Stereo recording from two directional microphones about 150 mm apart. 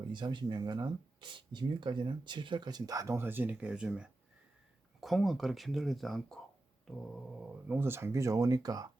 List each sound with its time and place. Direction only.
0.1 s speech: 30° right (ahead or behind)